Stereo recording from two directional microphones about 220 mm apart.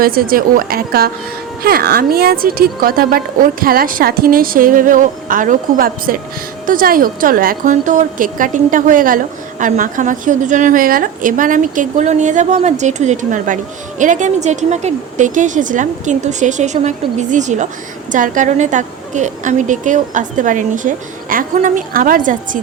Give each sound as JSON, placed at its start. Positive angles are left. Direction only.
{"t": 0.0, "sound": "a woman's voice", "side_deg": -40}